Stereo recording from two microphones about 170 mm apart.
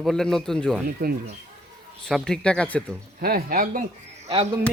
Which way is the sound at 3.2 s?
60° right (ahead or behind).